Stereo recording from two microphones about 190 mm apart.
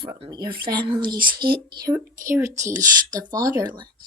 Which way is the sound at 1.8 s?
15° right (ahead or behind).